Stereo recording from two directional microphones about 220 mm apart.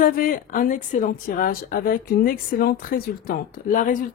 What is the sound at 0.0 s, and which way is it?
A man's voice, 40° left (ahead or behind).